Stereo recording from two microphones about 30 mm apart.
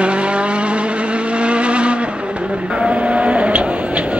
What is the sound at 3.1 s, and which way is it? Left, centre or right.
Vehicle, right.